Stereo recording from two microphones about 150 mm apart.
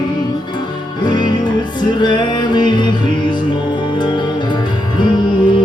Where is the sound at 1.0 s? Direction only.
30° left (ahead or behind).